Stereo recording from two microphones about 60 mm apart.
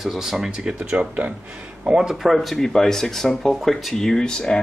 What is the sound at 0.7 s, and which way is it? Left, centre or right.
Speech, right.